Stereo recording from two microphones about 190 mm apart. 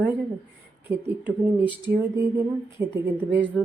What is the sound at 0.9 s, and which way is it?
Speech, 10° right (ahead or behind).